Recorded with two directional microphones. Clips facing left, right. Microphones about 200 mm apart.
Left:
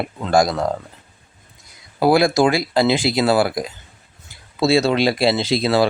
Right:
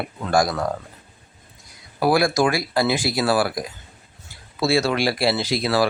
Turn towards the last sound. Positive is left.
turn(degrees=25)  # may be behind; listen again after turning